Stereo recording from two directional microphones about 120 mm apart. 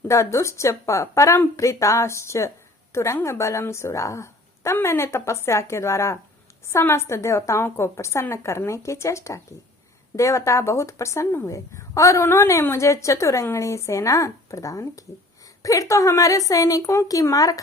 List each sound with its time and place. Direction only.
0.1 s speech: 25° left (ahead or behind)